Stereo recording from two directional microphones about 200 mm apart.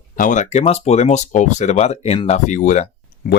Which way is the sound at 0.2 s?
40° left (ahead or behind).